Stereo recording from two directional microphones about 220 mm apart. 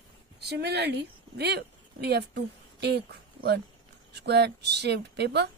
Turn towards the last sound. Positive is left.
turn(degrees=-50)  # may be behind; listen again after turning